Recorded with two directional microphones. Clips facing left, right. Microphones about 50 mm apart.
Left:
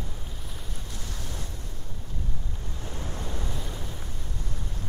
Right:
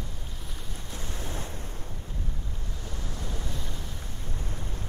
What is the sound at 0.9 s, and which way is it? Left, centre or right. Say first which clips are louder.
Waves: right 4 dB; right.